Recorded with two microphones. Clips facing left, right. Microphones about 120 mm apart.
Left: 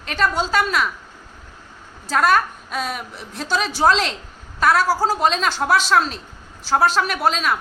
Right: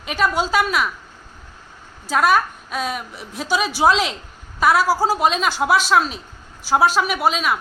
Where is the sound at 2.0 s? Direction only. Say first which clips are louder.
Even; 5° right (ahead or behind).